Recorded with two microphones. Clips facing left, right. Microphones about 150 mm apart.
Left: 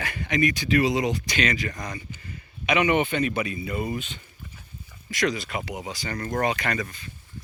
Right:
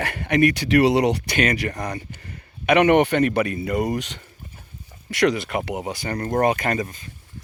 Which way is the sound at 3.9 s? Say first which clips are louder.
Right 5 dB; 75° right (ahead or behind).